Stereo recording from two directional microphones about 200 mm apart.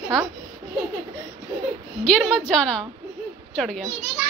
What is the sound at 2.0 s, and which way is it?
A woman's voice, 5° left (ahead or behind).